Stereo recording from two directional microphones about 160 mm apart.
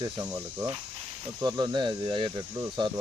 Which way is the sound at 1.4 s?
25° right (ahead or behind).